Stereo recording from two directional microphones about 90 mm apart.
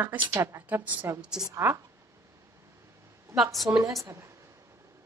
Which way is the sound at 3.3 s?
35° right (ahead or behind).